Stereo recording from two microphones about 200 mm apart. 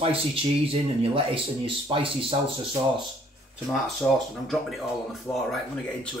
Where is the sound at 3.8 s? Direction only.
Centre (ahead or behind).